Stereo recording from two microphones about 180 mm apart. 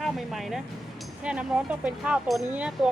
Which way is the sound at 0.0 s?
Centre (ahead or behind).